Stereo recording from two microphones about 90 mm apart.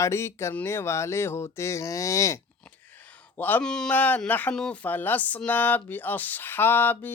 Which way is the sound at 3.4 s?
20° left (ahead or behind).